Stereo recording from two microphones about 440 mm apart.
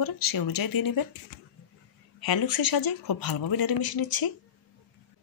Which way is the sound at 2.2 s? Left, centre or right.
Left.